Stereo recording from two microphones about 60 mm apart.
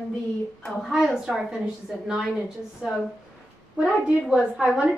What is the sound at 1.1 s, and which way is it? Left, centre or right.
A woman's voice, centre.